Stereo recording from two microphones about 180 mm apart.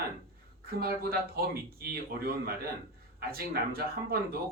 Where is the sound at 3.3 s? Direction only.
60° right (ahead or behind).